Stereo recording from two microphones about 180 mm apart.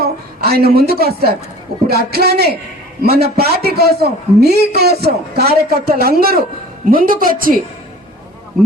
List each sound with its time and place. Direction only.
0.0 s a woman's voice: 60° right (ahead or behind)